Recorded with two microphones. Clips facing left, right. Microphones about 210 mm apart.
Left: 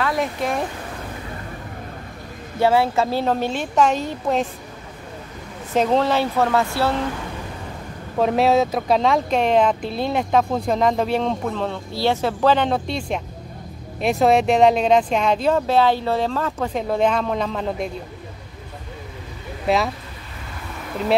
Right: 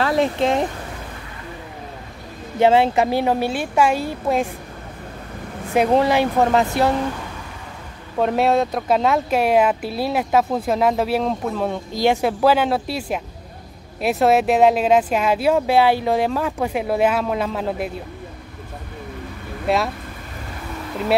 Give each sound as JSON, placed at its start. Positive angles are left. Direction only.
{"t": 0.0, "sound": "speech", "side_deg": -25}
{"t": 2.6, "sound": "speech", "side_deg": -20}
{"t": 5.7, "sound": "speech", "side_deg": -10}
{"t": 8.2, "sound": "speech", "side_deg": 0}